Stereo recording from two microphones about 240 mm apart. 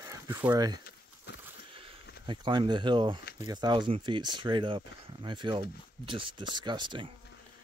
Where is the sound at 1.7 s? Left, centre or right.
Right.